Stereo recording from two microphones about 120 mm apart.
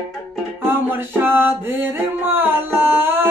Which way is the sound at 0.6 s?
15° right (ahead or behind).